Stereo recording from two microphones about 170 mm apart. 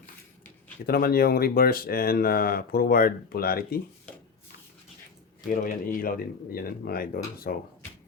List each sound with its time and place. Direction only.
0.9 s speech: 60° left (ahead or behind)
5.5 s speech: 55° left (ahead or behind)